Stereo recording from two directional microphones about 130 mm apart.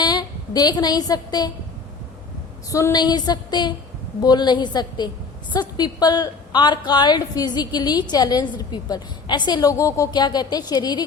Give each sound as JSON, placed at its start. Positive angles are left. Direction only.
{"t": 0.0, "sound": "a woman's voice", "side_deg": 30}
{"t": 2.6, "sound": "a woman's voice", "side_deg": 25}